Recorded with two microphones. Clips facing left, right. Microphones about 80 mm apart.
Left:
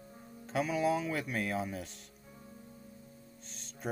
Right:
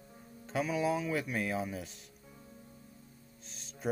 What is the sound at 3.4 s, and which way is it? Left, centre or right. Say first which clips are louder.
Music: right 1 dB; centre.